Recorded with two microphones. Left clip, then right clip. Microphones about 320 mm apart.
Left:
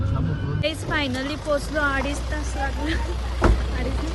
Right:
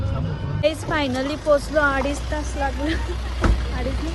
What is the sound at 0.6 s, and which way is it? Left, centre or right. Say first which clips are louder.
A woman's voice: right 4 dB; centre.